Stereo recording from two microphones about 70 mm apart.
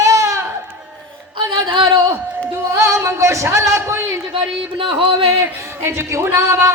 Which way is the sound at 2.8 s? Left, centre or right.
Right.